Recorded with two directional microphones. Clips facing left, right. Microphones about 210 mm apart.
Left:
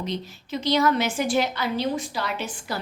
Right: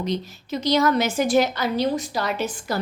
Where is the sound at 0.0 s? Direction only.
40° right (ahead or behind).